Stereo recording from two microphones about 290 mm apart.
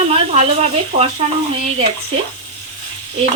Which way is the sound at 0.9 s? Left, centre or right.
Right.